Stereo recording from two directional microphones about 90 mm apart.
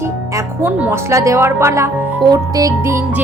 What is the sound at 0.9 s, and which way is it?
Speech, 35° right (ahead or behind).